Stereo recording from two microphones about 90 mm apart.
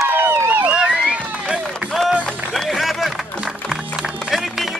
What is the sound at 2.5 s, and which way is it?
Run, centre (ahead or behind).